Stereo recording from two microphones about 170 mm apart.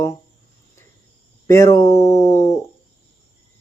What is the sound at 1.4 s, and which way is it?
Speech, 15° left (ahead or behind).